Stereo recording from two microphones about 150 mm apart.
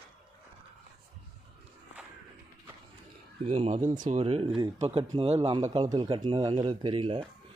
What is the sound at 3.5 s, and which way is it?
Speech, 45° right (ahead or behind).